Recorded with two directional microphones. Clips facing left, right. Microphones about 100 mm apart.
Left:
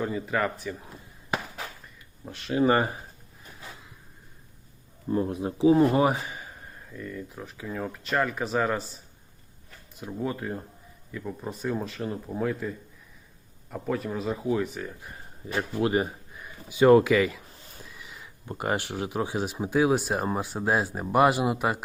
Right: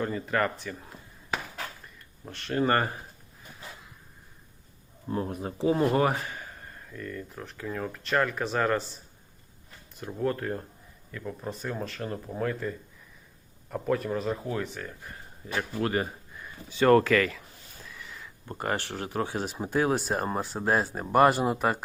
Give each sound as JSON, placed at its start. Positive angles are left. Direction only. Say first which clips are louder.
{"t": 0.0, "sound": "speech", "louder": "even", "side_deg": 5}
{"t": 2.2, "sound": "speech", "louder": "left 3 dB", "side_deg": 5}
{"t": 5.1, "sound": "speech", "louder": "left 4 dB", "side_deg": 5}